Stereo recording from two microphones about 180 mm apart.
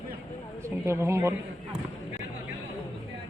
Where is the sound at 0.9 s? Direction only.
15° right (ahead or behind).